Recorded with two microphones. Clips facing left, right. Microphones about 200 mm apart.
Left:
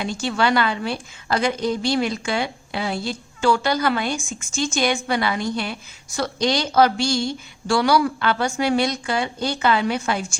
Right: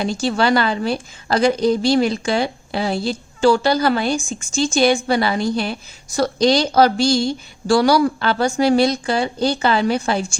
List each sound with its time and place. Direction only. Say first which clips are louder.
0.0 s a woman's voice: right 4 dB; 35° right (ahead or behind)